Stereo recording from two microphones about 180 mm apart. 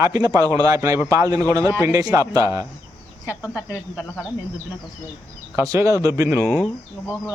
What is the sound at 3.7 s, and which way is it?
Speech, 15° left (ahead or behind).